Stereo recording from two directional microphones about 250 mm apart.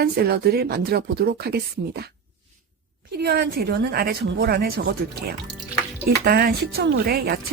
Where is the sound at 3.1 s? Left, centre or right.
Right.